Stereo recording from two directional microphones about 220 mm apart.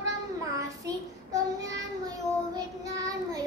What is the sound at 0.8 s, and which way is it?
Speech, 15° right (ahead or behind).